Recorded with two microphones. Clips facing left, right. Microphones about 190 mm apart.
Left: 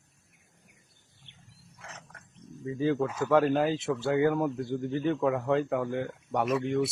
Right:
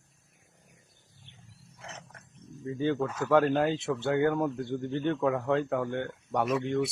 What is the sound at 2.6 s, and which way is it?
A man's voice, centre (ahead or behind).